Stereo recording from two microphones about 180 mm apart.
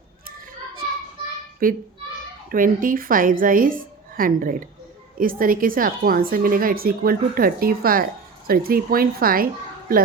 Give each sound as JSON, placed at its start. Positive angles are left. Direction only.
{"t": 1.6, "sound": "a woman's voice", "side_deg": -50}